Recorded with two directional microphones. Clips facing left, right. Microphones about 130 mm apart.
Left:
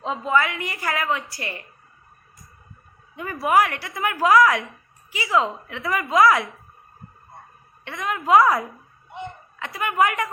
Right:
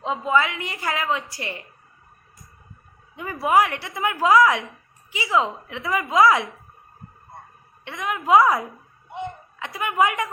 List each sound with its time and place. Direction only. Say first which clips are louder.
0.0 s a woman's voice: even; 20° right (ahead or behind)
3.2 s a woman's voice: even; 20° right (ahead or behind)
7.9 s a woman's voice: even; 15° right (ahead or behind)
9.1 s a sound: right 3 dB; 15° right (ahead or behind)
10.0 s a woman's voice: even; 20° right (ahead or behind)